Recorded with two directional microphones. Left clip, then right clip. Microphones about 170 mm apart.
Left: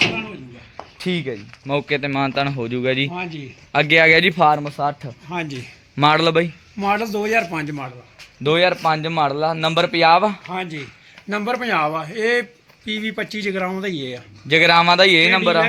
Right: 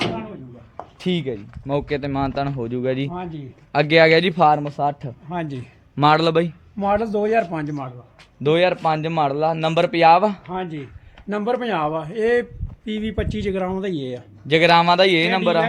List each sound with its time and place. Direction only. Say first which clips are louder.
0.9 s a man's voice: even; 20° right (ahead or behind)
5.3 s speech: left 1 dB; 55° right (ahead or behind)
6.0 s speech: left 1 dB; 5° right (ahead or behind)
6.7 s speech: even; 60° right (ahead or behind)
8.4 s speech: left 1 dB; 15° right (ahead or behind)
10.5 s a man's voice: left 1 dB; 40° right (ahead or behind)
11.3 s a man's voice: left 1 dB; 30° right (ahead or behind)
14.4 s speech: left 1 dB; 5° right (ahead or behind)